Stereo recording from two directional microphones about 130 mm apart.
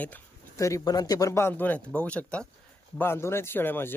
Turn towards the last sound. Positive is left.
turn(degrees=15)  # may be behind; listen again after turning